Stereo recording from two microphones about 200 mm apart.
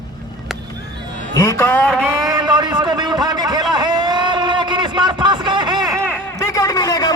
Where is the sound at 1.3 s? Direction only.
15° left (ahead or behind).